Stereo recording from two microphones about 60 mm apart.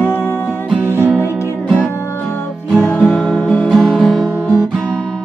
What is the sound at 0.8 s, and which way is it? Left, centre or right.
Music, right.